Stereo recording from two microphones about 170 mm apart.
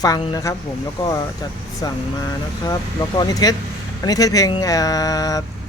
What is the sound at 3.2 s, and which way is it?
Speech, 20° left (ahead or behind).